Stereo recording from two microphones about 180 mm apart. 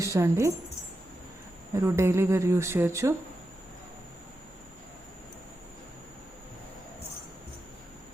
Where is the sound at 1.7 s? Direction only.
15° right (ahead or behind).